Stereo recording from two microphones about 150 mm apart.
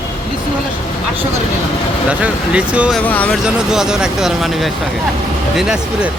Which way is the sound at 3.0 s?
10° left (ahead or behind).